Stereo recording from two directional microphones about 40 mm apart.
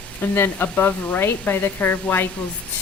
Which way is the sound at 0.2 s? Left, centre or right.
Left.